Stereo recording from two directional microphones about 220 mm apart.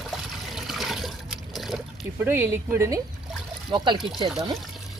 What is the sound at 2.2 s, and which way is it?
Speech, 10° right (ahead or behind).